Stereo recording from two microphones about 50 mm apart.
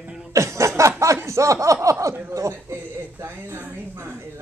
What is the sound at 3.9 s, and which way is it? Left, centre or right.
Speech, right.